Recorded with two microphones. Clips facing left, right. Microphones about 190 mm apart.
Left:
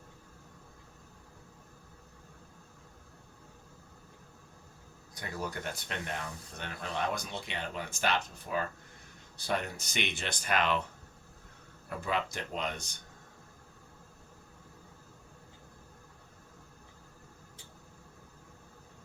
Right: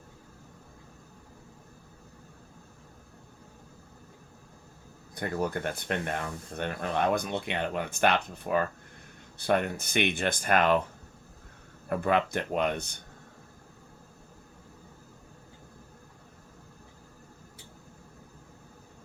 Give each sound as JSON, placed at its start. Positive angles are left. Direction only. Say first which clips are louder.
{"t": 5.1, "sound": "speech", "louder": "right 8 dB", "side_deg": -55}
{"t": 11.9, "sound": "speech", "louder": "right 8 dB", "side_deg": -60}